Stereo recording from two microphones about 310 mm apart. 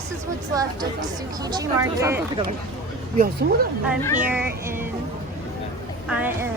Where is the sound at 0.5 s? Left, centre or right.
Centre.